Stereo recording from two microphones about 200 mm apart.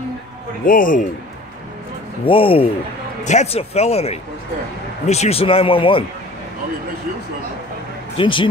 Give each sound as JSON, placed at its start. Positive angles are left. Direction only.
{"t": 0.7, "sound": "a man's voice", "side_deg": 45}
{"t": 2.2, "sound": "speech", "side_deg": 25}
{"t": 8.2, "sound": "speech", "side_deg": 25}